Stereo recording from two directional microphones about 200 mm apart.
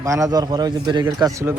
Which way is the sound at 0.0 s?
15° right (ahead or behind).